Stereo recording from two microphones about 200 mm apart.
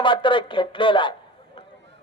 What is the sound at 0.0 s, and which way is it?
Speech, 25° left (ahead or behind).